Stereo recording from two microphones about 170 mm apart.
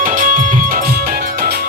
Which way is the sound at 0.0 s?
55° right (ahead or behind).